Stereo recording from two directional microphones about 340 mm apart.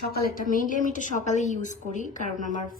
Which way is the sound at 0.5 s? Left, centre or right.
Left.